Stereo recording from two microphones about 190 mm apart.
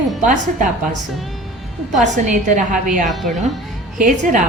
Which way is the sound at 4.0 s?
40° right (ahead or behind).